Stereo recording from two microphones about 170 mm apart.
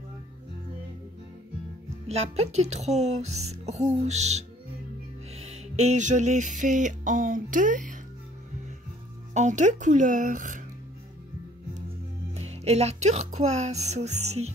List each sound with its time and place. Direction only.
2.0 s speech: 40° right (ahead or behind)
5.3 s music: 40° right (ahead or behind)
9.3 s speech: 45° right (ahead or behind)
12.4 s speech: 40° right (ahead or behind)